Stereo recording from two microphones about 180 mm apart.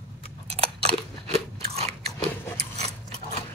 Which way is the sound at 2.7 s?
35° right (ahead or behind).